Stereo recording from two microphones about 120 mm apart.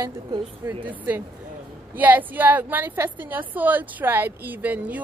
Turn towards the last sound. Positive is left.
turn(degrees=-15)  # may be behind; listen again after turning